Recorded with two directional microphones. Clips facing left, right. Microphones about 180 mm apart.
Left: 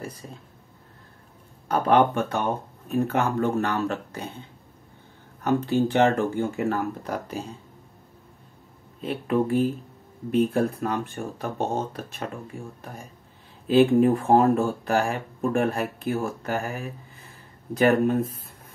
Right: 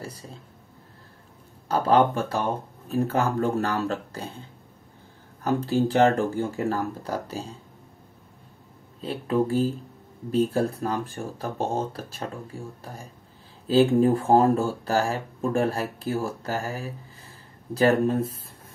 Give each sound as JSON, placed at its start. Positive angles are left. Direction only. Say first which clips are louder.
{"t": 1.7, "sound": "speech", "louder": "even", "side_deg": -30}
{"t": 5.4, "sound": "speech", "louder": "left 1 dB", "side_deg": -35}
{"t": 9.0, "sound": "speech", "louder": "even", "side_deg": -30}